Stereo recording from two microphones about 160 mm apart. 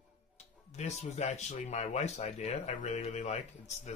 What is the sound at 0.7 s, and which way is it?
Speech, 45° left (ahead or behind).